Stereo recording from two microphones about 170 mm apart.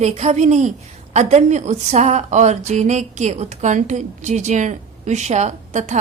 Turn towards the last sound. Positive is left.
turn(degrees=-45)  # may be behind; listen again after turning